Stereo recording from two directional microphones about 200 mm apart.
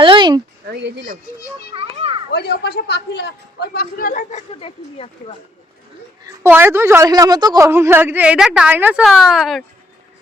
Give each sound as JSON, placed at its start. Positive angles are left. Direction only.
{"t": 0.0, "sound": "a sound", "side_deg": -25}
{"t": 0.8, "sound": "speech", "side_deg": -55}
{"t": 1.7, "sound": "a child's voice", "side_deg": -30}
{"t": 2.3, "sound": "speech", "side_deg": 55}
{"t": 6.2, "sound": "a woman's voice", "side_deg": -10}